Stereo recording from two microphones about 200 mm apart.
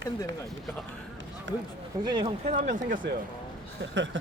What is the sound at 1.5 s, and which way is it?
Speech, 70° right (ahead or behind).